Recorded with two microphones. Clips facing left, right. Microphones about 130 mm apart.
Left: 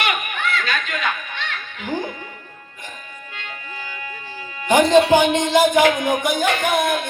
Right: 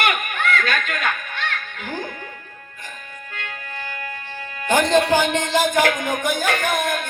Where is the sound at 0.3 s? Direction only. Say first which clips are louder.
Right 2 dB; 50° right (ahead or behind).